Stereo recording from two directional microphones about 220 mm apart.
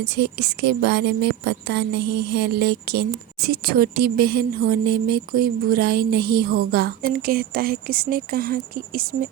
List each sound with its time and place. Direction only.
0.1 s a woman's voice: 50° right (ahead or behind)